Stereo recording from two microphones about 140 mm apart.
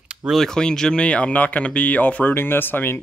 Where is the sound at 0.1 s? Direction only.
5° right (ahead or behind).